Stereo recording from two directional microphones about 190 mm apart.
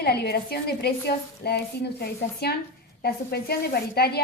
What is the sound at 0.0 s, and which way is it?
A woman's voice, 55° left (ahead or behind).